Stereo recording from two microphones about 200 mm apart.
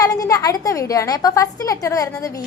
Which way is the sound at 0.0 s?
15° left (ahead or behind).